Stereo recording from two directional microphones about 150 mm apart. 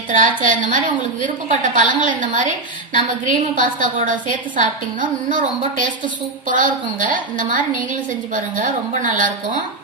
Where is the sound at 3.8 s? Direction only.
60° right (ahead or behind).